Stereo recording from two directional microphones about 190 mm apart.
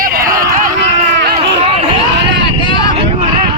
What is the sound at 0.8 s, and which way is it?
Run, 65° right (ahead or behind).